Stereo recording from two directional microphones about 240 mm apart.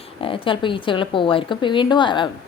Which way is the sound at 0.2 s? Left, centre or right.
Left.